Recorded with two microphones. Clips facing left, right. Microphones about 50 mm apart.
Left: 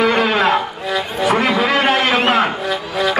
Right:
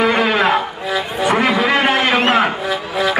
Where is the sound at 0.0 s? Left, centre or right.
Centre.